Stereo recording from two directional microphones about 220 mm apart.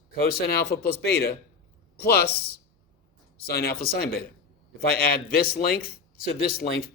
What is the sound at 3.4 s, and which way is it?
A man's voice, 45° left (ahead or behind).